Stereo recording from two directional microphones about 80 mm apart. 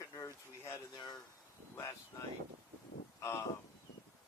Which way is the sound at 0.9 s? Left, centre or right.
Left.